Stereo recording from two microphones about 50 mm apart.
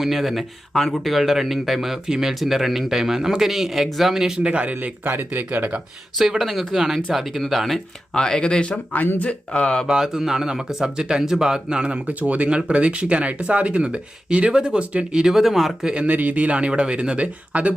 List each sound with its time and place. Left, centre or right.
0.0 s speech: centre
4.4 s speech: right
6.1 s speech: centre
8.1 s speech: centre
9.8 s speech: centre
15.1 s speech: centre
15.8 s speech: centre
16.0 s speech: right